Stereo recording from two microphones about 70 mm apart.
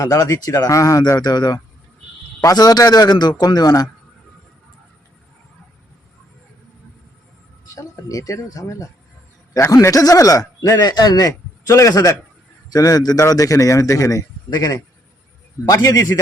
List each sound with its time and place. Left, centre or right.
0.0 s speech: left
1.2 s speech: left
2.4 s a man's voice: left
7.7 s speech: left
12.7 s speech: left
13.3 s speech: left